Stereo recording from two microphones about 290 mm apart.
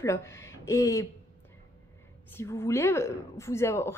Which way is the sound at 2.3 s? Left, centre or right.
Centre.